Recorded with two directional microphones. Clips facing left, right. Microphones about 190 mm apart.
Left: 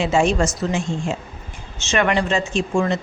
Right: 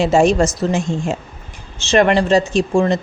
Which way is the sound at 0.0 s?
40° right (ahead or behind).